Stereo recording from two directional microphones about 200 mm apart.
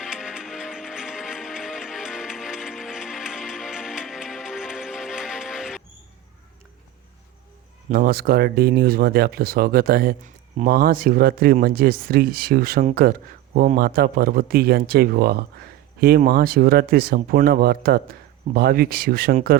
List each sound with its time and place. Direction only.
0.0 s music: 5° right (ahead or behind)
7.9 s speech: 45° right (ahead or behind)